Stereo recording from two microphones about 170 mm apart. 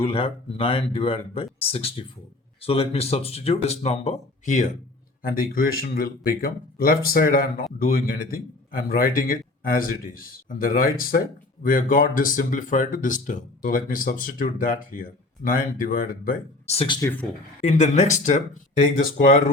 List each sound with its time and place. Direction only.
0.0 s speech: 35° left (ahead or behind)
5.2 s speech: 60° left (ahead or behind)
16.6 s speech: 30° left (ahead or behind)
17.6 s speech: 45° left (ahead or behind)